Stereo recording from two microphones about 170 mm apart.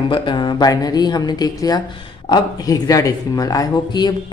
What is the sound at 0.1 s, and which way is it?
Speech, 30° left (ahead or behind).